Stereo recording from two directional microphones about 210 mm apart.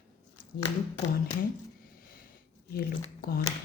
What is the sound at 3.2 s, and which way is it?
Speech, 40° left (ahead or behind).